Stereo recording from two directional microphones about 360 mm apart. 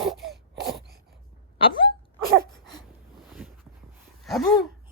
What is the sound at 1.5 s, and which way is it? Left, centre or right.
Dog, centre.